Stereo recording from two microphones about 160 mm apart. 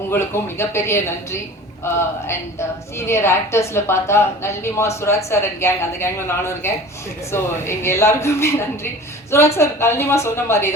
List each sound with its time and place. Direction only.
0.1 s a woman's voice: 15° left (ahead or behind)